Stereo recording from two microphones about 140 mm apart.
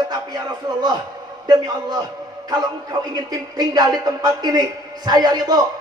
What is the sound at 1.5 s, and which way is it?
A man's voice, 30° right (ahead or behind).